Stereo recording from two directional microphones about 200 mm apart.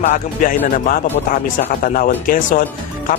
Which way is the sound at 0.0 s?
40° left (ahead or behind).